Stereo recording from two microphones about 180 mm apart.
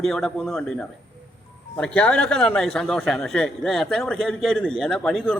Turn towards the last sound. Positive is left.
turn(degrees=0)  # may be behind; listen again after turning